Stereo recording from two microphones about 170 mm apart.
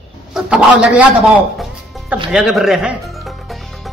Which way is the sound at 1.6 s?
Centre (ahead or behind).